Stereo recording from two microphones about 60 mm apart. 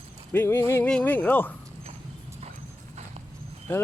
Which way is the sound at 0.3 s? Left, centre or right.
Left.